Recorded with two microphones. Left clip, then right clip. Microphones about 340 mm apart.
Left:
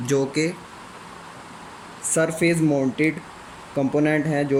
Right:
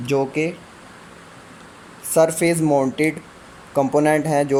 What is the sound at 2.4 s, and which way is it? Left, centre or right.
Speech, centre.